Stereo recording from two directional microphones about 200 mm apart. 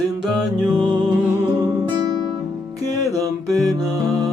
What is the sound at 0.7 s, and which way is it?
Music, 20° right (ahead or behind).